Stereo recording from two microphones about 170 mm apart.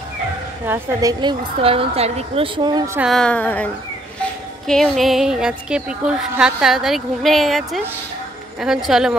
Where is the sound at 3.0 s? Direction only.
Centre (ahead or behind).